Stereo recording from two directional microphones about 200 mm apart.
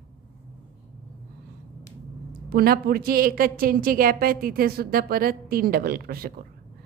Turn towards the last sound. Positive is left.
turn(degrees=-50)  # may be behind; listen again after turning